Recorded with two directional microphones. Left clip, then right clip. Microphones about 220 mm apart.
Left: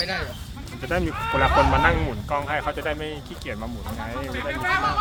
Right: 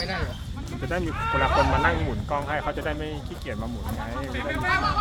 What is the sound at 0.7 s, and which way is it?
Speech, 30° left (ahead or behind).